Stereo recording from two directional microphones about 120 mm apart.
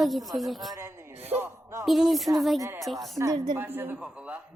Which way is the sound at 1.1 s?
65° right (ahead or behind).